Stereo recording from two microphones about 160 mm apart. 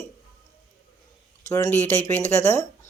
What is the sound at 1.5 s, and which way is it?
Speech, 20° left (ahead or behind).